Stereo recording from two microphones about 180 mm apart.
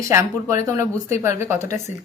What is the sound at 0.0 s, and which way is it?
A woman's voice, 15° right (ahead or behind).